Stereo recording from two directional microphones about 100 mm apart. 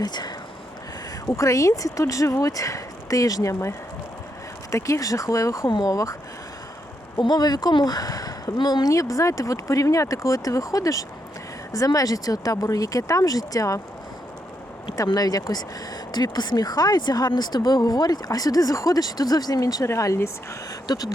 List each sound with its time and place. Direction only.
0.0 s speech: 45° left (ahead or behind)
1.3 s speech: 35° left (ahead or behind)
7.2 s speech: 45° left (ahead or behind)
14.9 s speech: 40° left (ahead or behind)
20.8 s speech: 40° left (ahead or behind)